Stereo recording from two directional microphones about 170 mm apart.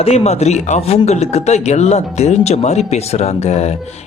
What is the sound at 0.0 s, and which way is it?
Speech, 40° left (ahead or behind).